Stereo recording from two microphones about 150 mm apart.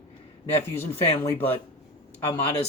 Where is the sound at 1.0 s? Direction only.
15° left (ahead or behind).